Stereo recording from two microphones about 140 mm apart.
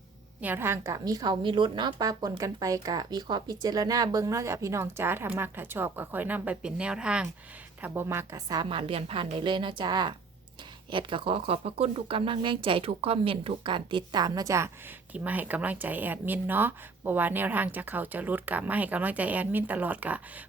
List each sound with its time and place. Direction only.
0.4 s a woman's voice: 15° right (ahead or behind)
8.9 s speech: 40° right (ahead or behind); by 14.7 s 20° right (ahead or behind)
15.1 s speech: 10° right (ahead or behind)